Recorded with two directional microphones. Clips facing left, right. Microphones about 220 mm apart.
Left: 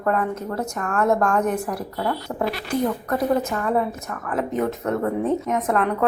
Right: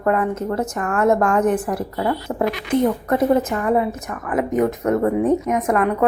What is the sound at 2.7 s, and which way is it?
A woman's voice, 20° right (ahead or behind).